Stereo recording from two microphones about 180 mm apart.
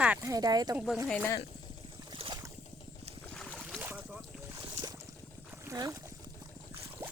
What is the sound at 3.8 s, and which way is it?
Boat, 10° right (ahead or behind).